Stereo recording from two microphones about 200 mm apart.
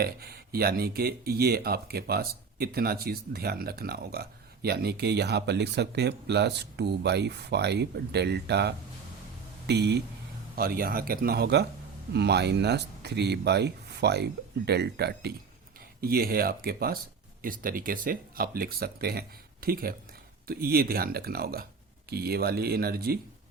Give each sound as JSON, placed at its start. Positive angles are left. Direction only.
{"t": 0.0, "sound": "speech", "side_deg": -50}